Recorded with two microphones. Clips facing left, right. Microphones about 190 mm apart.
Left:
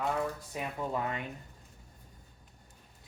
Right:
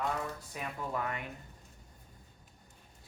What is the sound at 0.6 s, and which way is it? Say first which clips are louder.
Speech: left 3 dB; 20° left (ahead or behind).